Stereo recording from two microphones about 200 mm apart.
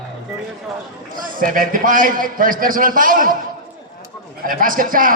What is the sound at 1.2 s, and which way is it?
A man's voice, 45° right (ahead or behind).